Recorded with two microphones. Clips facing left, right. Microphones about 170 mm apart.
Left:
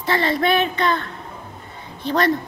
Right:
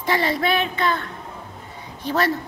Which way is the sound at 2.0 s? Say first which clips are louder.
Left 2 dB; 5° right (ahead or behind).